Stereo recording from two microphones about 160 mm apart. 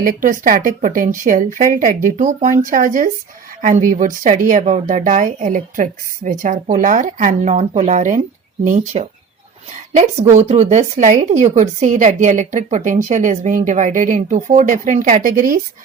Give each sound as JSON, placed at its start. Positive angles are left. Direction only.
{"t": 0.0, "sound": "speech", "side_deg": -60}